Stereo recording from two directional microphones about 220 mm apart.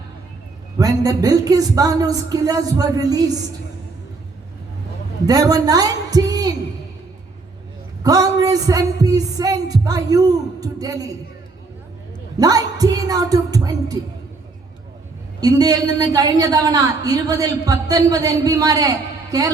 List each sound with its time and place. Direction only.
0.8 s a woman's voice: 15° right (ahead or behind)
5.2 s a woman's voice: 15° right (ahead or behind)
8.0 s a woman's voice: 15° right (ahead or behind)
12.4 s a woman's voice: 15° right (ahead or behind)
15.4 s a woman's voice: 15° right (ahead or behind)